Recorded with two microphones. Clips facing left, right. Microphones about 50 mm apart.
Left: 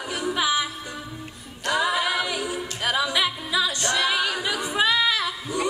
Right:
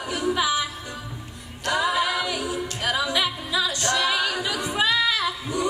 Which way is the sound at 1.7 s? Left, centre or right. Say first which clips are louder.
Even; centre.